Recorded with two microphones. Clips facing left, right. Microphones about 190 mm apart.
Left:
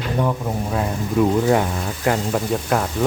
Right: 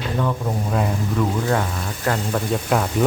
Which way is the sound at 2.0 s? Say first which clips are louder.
Left 2 dB; 5° left (ahead or behind).